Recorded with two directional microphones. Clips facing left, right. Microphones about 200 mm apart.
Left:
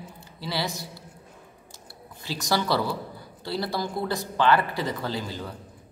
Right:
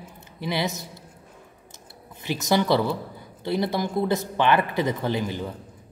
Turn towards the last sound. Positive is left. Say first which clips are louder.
# right 5 dB
turn(degrees=-20)  # may be behind; listen again after turning